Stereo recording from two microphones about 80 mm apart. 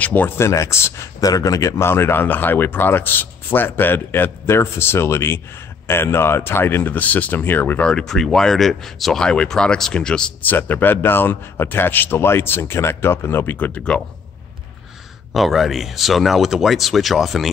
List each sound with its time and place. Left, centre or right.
0.0 s speech: left
0.4 s speech: left
1.2 s speech: left
7.8 s speech: centre
10.4 s speech: left
15.3 s speech: centre